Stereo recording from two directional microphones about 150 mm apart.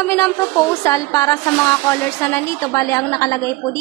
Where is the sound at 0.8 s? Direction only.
20° left (ahead or behind).